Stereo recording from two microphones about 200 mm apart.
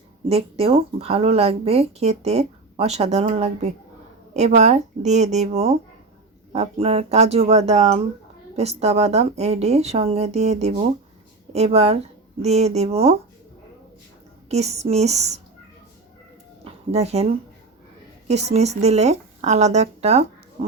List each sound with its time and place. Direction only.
0.3 s speech: 30° right (ahead or behind)
14.5 s speech: 35° right (ahead or behind)
16.6 s speech: 30° right (ahead or behind)